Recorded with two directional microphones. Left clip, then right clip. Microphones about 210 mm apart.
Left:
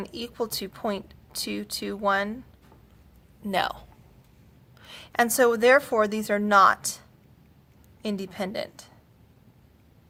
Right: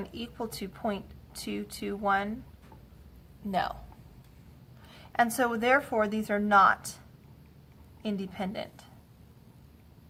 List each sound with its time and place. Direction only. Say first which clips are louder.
0.0 s speech: left 6 dB; 40° left (ahead or behind)
3.5 s speech: left 4 dB; 45° left (ahead or behind)
4.9 s speech: left 3 dB; 45° left (ahead or behind)
8.0 s speech: left 4 dB; 40° left (ahead or behind)